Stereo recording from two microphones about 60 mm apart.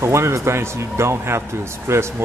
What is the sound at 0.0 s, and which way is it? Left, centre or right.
Speech, right.